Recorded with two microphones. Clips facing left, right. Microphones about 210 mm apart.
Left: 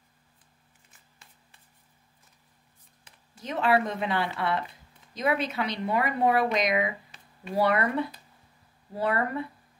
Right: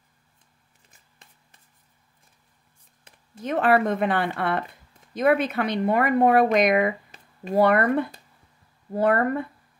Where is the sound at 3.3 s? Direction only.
50° right (ahead or behind).